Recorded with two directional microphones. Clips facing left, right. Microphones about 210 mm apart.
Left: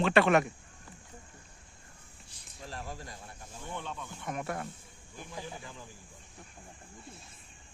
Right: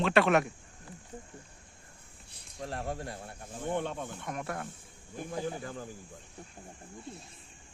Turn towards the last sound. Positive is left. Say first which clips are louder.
# right 7 dB
turn(degrees=-50)  # may be behind; listen again after turning